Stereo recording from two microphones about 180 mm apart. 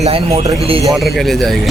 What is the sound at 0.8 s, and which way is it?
Speech, centre (ahead or behind).